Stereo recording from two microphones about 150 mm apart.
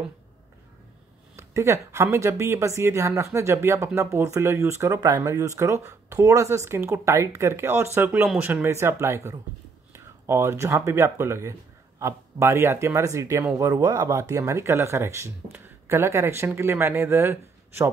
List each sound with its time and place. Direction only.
1.3 s a woman's voice: 20° right (ahead or behind)